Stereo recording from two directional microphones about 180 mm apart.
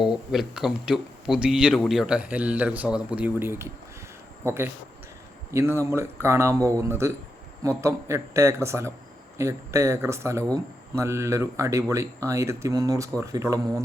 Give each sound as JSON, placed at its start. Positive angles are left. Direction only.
{"t": 0.0, "sound": "speech", "side_deg": 0}